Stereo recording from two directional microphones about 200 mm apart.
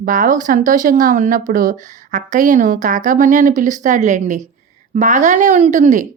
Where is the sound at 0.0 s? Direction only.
40° right (ahead or behind).